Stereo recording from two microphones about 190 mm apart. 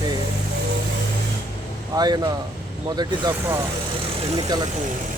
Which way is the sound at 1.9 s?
20° right (ahead or behind).